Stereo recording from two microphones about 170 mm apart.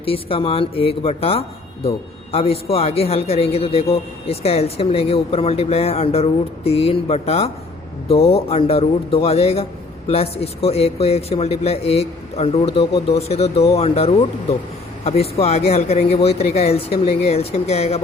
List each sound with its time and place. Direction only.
0.0 s speech: 35° left (ahead or behind)